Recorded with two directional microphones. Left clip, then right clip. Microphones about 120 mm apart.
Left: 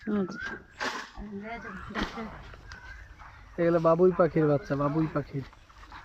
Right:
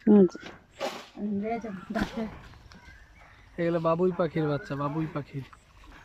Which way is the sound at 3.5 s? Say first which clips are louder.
Left 3 dB; centre (ahead or behind).